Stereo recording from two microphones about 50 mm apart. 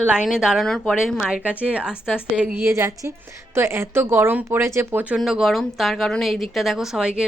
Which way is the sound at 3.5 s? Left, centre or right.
Right.